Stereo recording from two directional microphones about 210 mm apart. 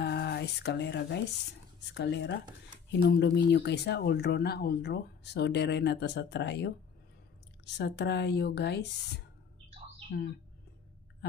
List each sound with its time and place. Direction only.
0.0 s speech: 50° left (ahead or behind)